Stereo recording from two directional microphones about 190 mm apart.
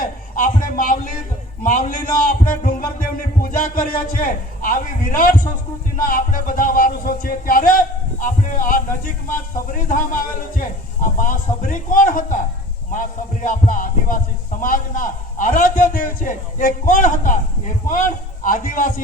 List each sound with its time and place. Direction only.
0.0 s a sound: 45° left (ahead or behind)
1.6 s speech: 45° left (ahead or behind)
2.4 s music: 45° left (ahead or behind)
6.0 s a man's voice: 45° left (ahead or behind)